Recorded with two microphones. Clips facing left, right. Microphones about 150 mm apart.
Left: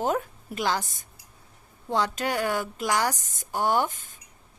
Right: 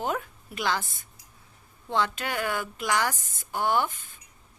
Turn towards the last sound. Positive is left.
turn(degrees=45)  # may be behind; listen again after turning